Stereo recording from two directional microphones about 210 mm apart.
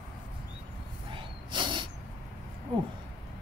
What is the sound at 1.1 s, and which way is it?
Snort, 20° right (ahead or behind).